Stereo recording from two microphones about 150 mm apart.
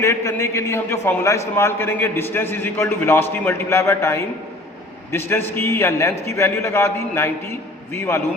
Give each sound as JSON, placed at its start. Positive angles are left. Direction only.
{"t": 0.0, "sound": "a man's voice", "side_deg": 20}